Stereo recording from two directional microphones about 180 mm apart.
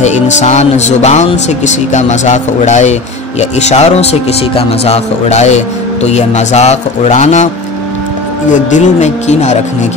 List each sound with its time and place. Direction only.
0.0 s speech: 40° left (ahead or behind)
8.5 s speech: 45° left (ahead or behind)